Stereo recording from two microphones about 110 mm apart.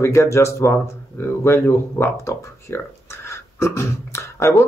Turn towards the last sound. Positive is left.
turn(degrees=25)  # may be behind; listen again after turning